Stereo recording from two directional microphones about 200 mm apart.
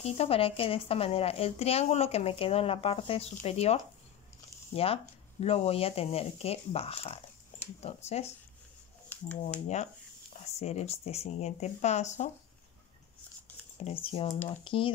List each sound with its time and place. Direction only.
0.0 s speech: 30° left (ahead or behind)
10.6 s speech: 35° left (ahead or behind)
13.7 s speech: 30° left (ahead or behind)